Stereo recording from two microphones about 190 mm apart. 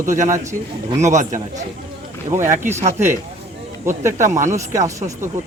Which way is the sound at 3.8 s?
15° right (ahead or behind).